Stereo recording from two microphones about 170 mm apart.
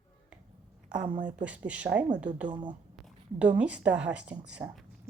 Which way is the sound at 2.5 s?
25° right (ahead or behind).